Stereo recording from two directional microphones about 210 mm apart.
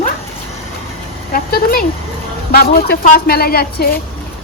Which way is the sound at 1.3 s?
45° left (ahead or behind).